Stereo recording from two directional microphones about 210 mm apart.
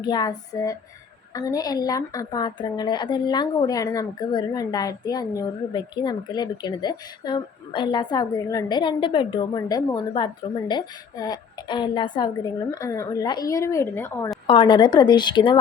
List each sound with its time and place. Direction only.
0.0 s a woman's voice: 20° left (ahead or behind)
14.4 s a woman's voice: 25° left (ahead or behind)